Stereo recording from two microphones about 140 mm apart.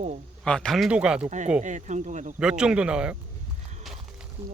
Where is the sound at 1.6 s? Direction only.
60° right (ahead or behind).